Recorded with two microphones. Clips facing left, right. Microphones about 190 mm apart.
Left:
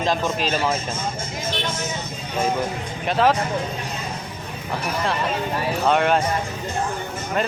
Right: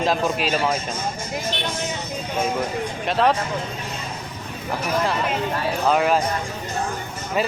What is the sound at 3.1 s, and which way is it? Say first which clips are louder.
Speech: left 1 dB; centre (ahead or behind).